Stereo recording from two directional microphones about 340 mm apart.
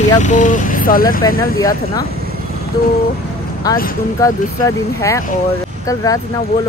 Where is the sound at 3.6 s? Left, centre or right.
Centre.